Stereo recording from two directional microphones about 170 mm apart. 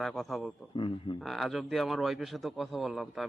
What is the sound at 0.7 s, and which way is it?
Speech, 30° left (ahead or behind).